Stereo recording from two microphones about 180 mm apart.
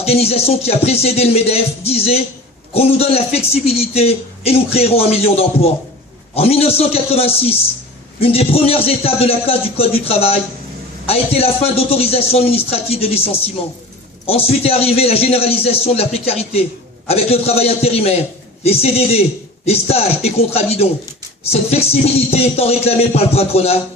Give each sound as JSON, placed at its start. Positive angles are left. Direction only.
{"t": 0.0, "sound": "a man's voice", "side_deg": 35}